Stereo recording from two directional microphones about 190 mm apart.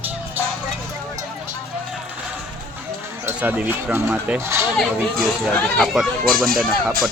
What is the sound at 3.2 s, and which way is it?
Speech, 10° right (ahead or behind).